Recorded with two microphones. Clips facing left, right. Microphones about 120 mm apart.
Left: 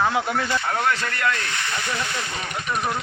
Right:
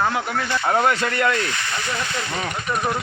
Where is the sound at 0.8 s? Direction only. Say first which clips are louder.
Right 4 dB; 25° right (ahead or behind).